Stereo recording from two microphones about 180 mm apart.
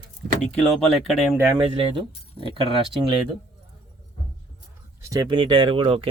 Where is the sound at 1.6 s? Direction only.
30° right (ahead or behind).